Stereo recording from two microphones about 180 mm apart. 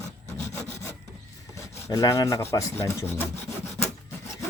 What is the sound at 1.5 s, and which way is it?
Speech, 15° left (ahead or behind).